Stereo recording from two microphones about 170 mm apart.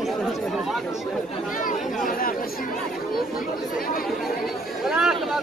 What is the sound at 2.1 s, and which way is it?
Speech, 60° left (ahead or behind).